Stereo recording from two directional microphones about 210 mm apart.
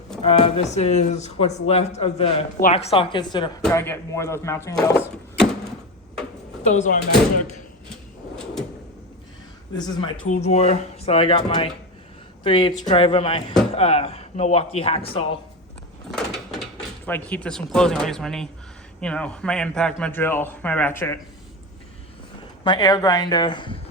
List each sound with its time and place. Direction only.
0.2 s speech: 30° left (ahead or behind); by 5.5 s 5° left (ahead or behind)
6.7 s speech: 35° left (ahead or behind)
9.7 s speech: 20° left (ahead or behind)
10.2 s speech: 35° left (ahead or behind)
16.1 s door: centre (ahead or behind)
17.1 s speech: 10° left (ahead or behind)
22.6 s speech: 20° left (ahead or behind)